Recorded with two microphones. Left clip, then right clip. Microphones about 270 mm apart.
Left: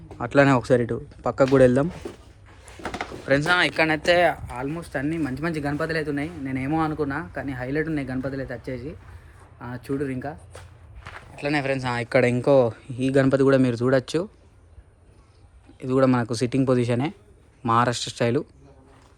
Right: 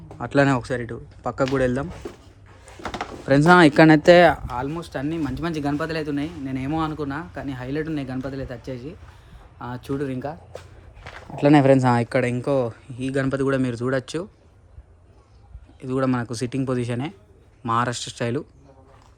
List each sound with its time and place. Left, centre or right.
0.2 s speech: centre
2.8 s a sound: centre
3.3 s speech: centre
3.6 s speech: right
4.5 s speech: centre
11.3 s speech: right
12.0 s speech: centre
15.8 s speech: centre